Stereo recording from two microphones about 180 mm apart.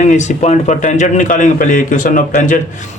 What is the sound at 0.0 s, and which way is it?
Speech, 40° left (ahead or behind).